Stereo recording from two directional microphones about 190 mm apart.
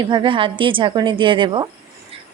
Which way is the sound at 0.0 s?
25° right (ahead or behind).